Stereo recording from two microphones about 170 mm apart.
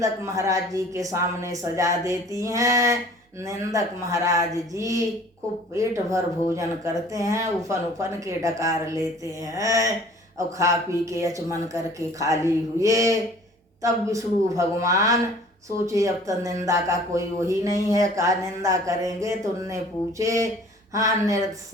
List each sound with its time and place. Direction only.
0.0 s speech: 20° right (ahead or behind)